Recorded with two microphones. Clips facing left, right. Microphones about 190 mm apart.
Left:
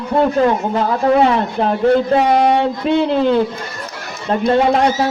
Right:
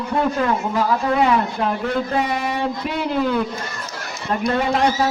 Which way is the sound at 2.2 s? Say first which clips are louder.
Left 10 dB; 70° left (ahead or behind).